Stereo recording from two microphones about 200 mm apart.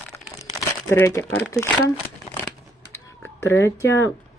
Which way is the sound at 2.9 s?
10° left (ahead or behind).